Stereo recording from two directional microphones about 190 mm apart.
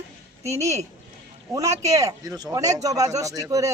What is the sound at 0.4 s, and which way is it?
A man's voice, 15° right (ahead or behind).